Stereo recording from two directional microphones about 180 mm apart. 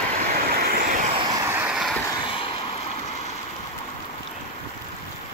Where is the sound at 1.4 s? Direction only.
10° right (ahead or behind).